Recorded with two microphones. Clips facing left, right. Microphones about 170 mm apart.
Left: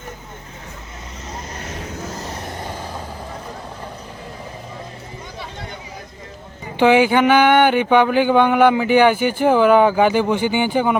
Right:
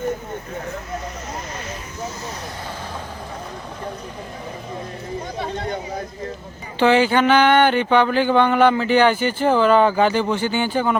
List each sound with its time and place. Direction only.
6.7 s speech: 15° left (ahead or behind)